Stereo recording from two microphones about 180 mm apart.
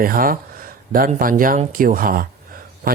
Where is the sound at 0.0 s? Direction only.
50° right (ahead or behind).